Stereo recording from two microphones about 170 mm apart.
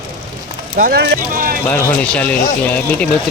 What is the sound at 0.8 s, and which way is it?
Speech, 55° right (ahead or behind).